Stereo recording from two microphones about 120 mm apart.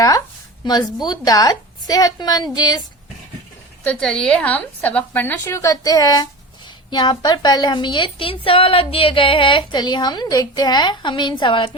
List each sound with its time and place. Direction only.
0.6 s a woman's voice: 35° left (ahead or behind)
3.8 s a woman's voice: 5° left (ahead or behind); by 11.8 s 45° left (ahead or behind)